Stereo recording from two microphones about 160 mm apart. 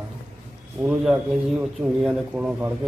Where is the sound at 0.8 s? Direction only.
5° right (ahead or behind).